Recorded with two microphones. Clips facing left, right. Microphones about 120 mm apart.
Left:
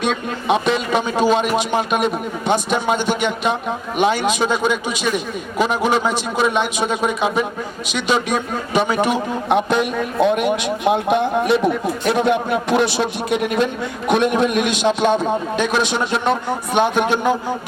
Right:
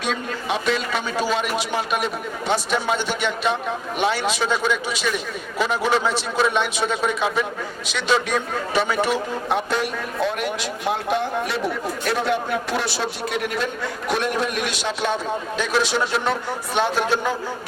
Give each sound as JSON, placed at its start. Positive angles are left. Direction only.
{"t": 0.0, "sound": "a man's voice", "side_deg": 20}